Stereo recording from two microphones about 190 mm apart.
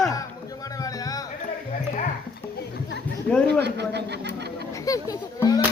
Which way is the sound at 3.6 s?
60° right (ahead or behind).